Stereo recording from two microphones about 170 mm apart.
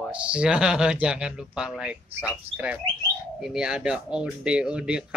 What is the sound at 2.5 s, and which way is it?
Speech, 35° right (ahead or behind).